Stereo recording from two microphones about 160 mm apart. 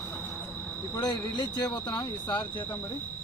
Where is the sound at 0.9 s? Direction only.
25° left (ahead or behind).